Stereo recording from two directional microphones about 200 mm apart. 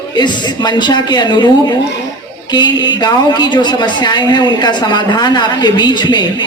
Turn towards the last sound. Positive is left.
turn(degrees=20)  # may be behind; listen again after turning